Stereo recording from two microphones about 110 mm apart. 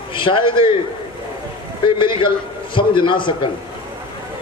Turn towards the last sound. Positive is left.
turn(degrees=50)  # may be behind; listen again after turning